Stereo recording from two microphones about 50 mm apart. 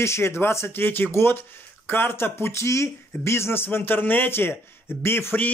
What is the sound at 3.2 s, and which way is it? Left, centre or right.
A man's voice, left.